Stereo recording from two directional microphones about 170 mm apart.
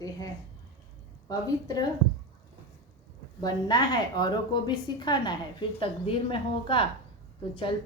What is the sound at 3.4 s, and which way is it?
A woman's voice, 25° left (ahead or behind).